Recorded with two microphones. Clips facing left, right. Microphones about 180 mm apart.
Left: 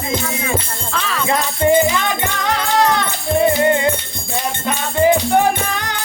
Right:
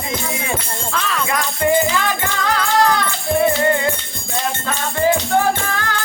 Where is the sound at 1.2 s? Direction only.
25° left (ahead or behind).